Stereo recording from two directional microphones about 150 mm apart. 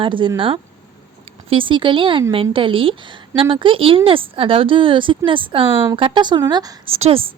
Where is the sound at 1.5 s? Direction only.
35° right (ahead or behind).